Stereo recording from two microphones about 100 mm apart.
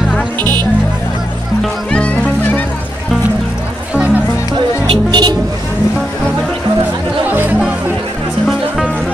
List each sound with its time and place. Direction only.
0.4 s music: 40° right (ahead or behind)
1.6 s music: 10° left (ahead or behind)
3.9 s music: 15° right (ahead or behind)
4.6 s music: 50° right (ahead or behind)
7.2 s music: 20° right (ahead or behind)